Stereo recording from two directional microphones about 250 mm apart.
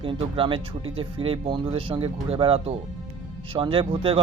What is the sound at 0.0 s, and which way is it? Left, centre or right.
Speech, centre.